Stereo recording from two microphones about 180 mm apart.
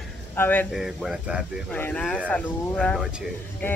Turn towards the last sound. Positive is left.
turn(degrees=10)  # may be behind; listen again after turning